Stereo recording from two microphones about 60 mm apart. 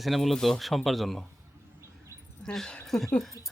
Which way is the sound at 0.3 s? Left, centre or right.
Centre.